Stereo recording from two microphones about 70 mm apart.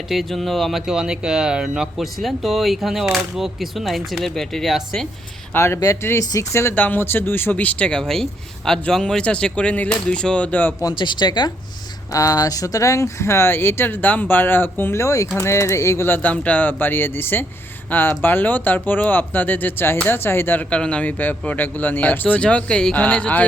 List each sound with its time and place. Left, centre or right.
0.1 s speech: centre
5.5 s speech: left
6.7 s speech: left
7.5 s speech: left
10.8 s speech: left
12.1 s speech: left
15.0 s speech: left
16.0 s speech: left
20.7 s speech: centre